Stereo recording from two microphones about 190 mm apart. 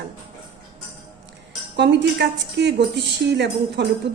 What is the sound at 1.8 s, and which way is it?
A woman's voice, 65° right (ahead or behind).